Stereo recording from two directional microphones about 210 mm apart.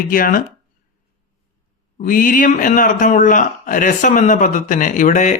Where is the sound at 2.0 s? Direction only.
40° left (ahead or behind).